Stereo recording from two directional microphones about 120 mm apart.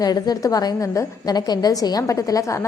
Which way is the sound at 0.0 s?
30° left (ahead or behind).